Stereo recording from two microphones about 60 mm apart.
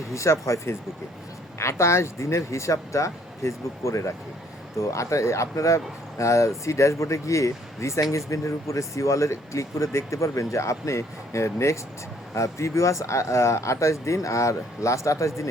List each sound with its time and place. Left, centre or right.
0.1 s speech: left